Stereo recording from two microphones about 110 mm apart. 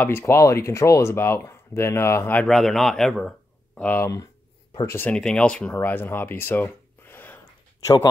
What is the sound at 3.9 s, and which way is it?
Speech, 20° left (ahead or behind).